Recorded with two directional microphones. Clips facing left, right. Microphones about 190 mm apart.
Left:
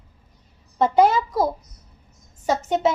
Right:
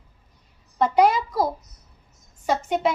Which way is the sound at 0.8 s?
25° left (ahead or behind).